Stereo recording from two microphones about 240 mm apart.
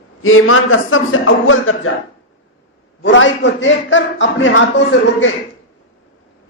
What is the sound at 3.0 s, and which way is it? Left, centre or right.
A man's voice, left.